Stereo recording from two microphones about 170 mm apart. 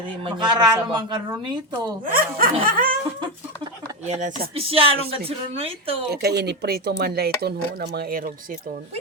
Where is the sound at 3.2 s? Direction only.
25° right (ahead or behind).